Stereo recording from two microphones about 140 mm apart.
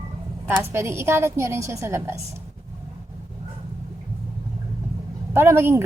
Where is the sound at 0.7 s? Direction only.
20° right (ahead or behind).